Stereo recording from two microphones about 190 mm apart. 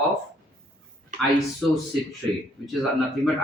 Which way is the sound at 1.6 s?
5° left (ahead or behind).